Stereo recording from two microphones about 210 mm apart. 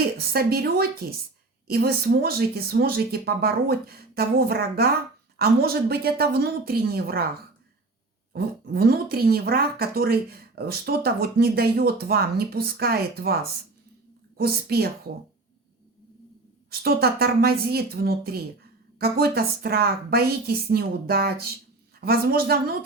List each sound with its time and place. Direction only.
0.2 s speech: 45° right (ahead or behind)
8.3 s speech: 45° right (ahead or behind)
16.6 s speech: 45° right (ahead or behind)